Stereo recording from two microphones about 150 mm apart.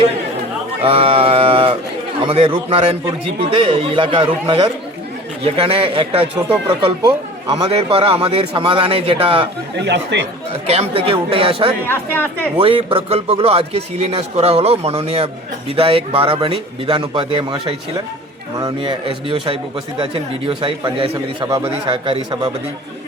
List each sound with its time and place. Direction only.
0.8 s a sound: 40° right (ahead or behind)
2.2 s speech: 35° right (ahead or behind)
7.0 s speech: 25° right (ahead or behind)
7.6 s speech: 40° right (ahead or behind)
10.5 s speech: 45° right (ahead or behind)
11.9 s speech: 15° left (ahead or behind)
12.5 s speech: 35° right (ahead or behind)